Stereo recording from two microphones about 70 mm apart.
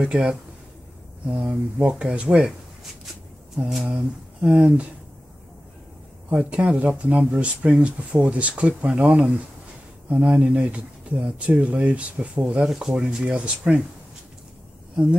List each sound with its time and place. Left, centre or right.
0.0 s speech: centre
1.5 s speech: centre
3.8 s speech: centre
6.3 s speech: centre
12.6 s speech: centre